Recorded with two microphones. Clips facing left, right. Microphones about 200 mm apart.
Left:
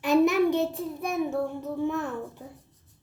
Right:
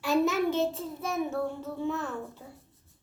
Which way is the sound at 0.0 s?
15° left (ahead or behind).